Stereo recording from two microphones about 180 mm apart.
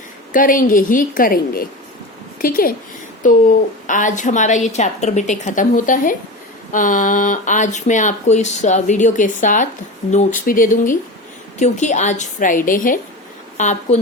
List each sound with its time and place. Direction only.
0.3 s speech: 50° left (ahead or behind)
3.8 s a woman's voice: 45° left (ahead or behind)